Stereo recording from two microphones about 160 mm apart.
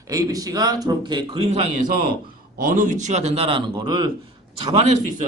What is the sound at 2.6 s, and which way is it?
A man's voice, 55° right (ahead or behind).